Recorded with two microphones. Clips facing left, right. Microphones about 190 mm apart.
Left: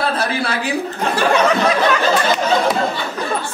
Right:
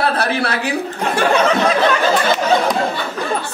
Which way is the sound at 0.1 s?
65° right (ahead or behind).